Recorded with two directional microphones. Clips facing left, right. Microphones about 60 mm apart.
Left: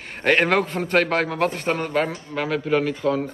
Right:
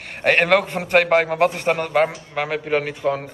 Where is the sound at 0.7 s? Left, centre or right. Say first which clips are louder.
Even; right.